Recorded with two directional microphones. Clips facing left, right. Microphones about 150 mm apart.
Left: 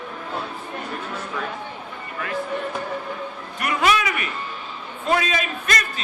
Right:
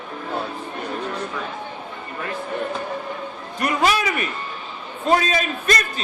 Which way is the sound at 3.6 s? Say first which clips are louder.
Right 1 dB; 35° right (ahead or behind).